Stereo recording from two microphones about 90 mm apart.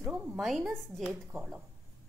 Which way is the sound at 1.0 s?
15° right (ahead or behind).